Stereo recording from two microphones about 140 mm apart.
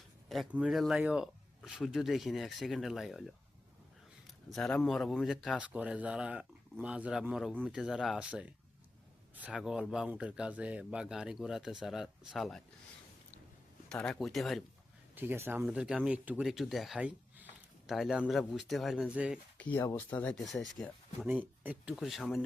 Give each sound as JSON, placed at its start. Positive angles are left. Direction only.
{"t": 0.5, "sound": "speech", "side_deg": -5}
{"t": 4.5, "sound": "speech", "side_deg": 5}
{"t": 13.9, "sound": "speech", "side_deg": 5}
{"t": 15.1, "sound": "speech", "side_deg": -15}
{"t": 15.6, "sound": "speech", "side_deg": -5}
{"t": 19.5, "sound": "speech", "side_deg": 10}
{"t": 21.2, "sound": "speech", "side_deg": -15}
{"t": 21.9, "sound": "speech", "side_deg": 0}